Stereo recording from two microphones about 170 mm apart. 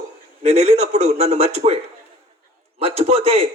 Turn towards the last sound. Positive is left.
turn(degrees=-35)  # may be behind; listen again after turning